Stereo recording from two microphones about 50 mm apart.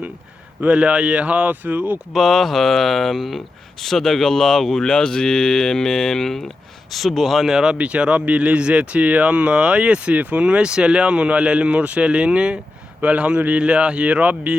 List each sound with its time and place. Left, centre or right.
0.6 s speech: right
2.1 s speech: centre
7.5 s speech: centre
7.8 s speech: right